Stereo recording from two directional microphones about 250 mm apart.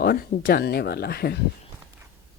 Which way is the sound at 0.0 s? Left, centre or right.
Left.